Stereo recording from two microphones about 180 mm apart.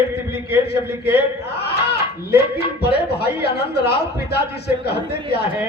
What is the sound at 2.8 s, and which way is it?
Speech, 65° left (ahead or behind).